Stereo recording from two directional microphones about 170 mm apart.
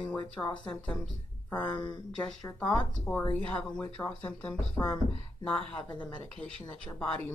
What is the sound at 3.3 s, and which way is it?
Speech, 10° left (ahead or behind).